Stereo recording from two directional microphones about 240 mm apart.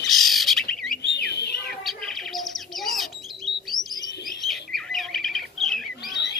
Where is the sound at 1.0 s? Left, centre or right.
Left.